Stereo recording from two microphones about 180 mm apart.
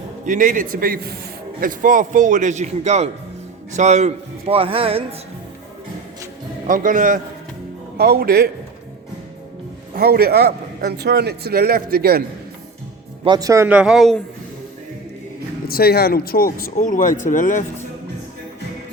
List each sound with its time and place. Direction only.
0.3 s a man's voice: 50° right (ahead or behind); by 5.0 s 30° right (ahead or behind)
6.7 s a man's voice: 45° right (ahead or behind)
7.9 s a man's voice: 60° right (ahead or behind)
9.9 s a man's voice: 60° right (ahead or behind)
13.2 s speech: 20° right (ahead or behind); by 14.2 s centre (ahead or behind)
15.6 s speech: 60° left (ahead or behind)